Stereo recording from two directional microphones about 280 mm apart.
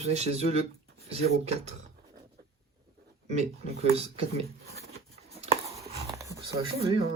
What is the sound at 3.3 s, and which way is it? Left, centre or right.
Speech, right.